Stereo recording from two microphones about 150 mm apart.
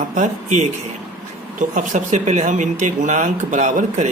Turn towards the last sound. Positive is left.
turn(degrees=-55)  # may be behind; listen again after turning